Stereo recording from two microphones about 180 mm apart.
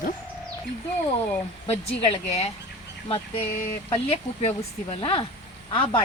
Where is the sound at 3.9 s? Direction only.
35° left (ahead or behind).